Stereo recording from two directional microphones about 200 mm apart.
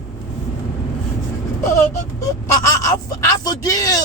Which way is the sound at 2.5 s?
15° left (ahead or behind).